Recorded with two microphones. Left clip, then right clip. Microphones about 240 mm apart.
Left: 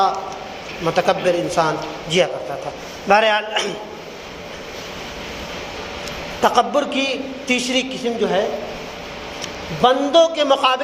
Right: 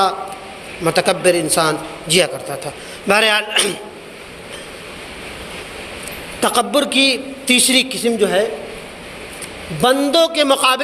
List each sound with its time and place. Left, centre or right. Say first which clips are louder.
0.9 s a man's voice: right 2 dB; right
6.4 s a man's voice: even; right
9.8 s a man's voice: even; right